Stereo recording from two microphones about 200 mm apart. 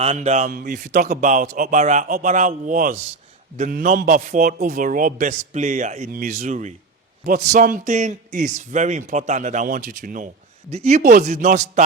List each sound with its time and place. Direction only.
0.0 s a man's voice: 35° right (ahead or behind)